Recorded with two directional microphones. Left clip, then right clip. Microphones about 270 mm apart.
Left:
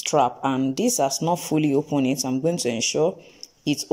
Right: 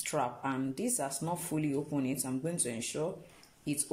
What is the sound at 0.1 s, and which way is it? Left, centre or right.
Speech, left.